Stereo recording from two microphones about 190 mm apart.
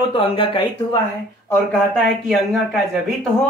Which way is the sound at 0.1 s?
30° left (ahead or behind).